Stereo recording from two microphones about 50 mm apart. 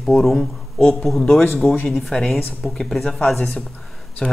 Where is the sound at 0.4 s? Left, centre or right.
Centre.